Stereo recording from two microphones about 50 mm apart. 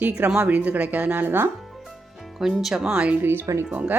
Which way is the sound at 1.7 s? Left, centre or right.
Centre.